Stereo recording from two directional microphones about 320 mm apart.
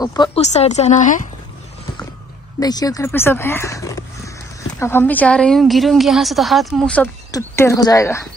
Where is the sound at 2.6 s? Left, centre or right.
Centre.